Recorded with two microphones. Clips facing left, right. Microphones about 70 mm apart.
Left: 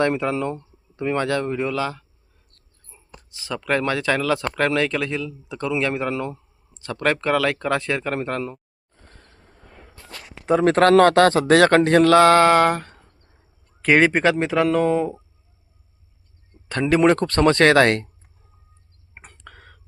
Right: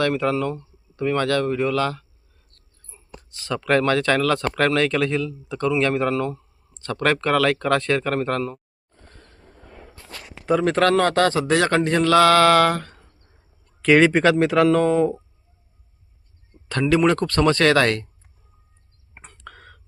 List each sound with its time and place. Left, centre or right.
0.0 s speech: left; by 8.6 s centre
10.6 s a man's voice: left
10.9 s speech: left
11.2 s a man's voice: left
12.1 s speech: left; by 15.2 s centre
16.6 s speech: left
19.2 s a sound: centre